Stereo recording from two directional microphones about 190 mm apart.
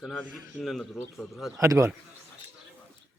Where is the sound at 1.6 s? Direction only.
15° right (ahead or behind).